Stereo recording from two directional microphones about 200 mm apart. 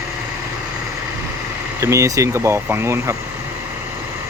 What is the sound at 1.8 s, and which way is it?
Speech, 15° right (ahead or behind).